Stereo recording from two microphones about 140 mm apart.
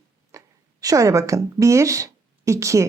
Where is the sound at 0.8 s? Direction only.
25° right (ahead or behind).